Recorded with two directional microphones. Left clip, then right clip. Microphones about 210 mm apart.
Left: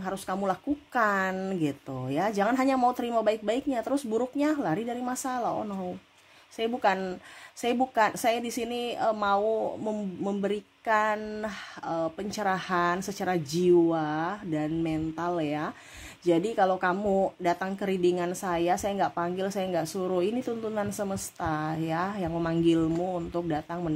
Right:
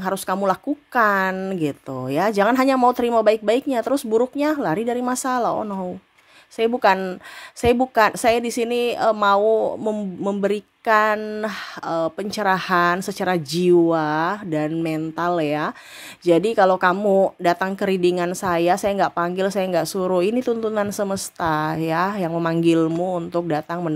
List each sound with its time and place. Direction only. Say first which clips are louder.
0.0 s a woman's voice: right 9 dB; 25° right (ahead or behind)